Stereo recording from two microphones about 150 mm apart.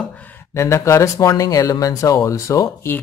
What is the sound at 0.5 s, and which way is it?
Speech, 20° left (ahead or behind).